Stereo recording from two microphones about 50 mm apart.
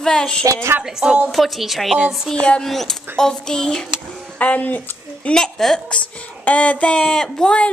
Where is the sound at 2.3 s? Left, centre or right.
Left.